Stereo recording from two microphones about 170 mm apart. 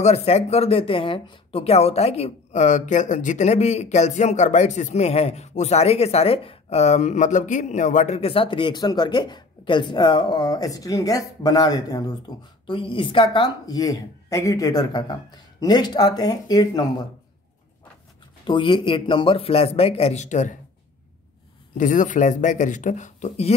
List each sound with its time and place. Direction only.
0.0 s speech: 40° left (ahead or behind); by 16.8 s 20° left (ahead or behind)
18.4 s speech: 30° left (ahead or behind); by 20.5 s 45° left (ahead or behind)
21.7 s speech: 50° left (ahead or behind)